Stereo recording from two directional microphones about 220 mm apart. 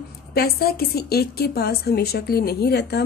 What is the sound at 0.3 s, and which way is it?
A woman's voice, 45° left (ahead or behind).